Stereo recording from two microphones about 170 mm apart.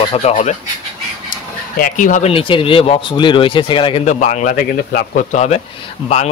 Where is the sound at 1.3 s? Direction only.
55° left (ahead or behind).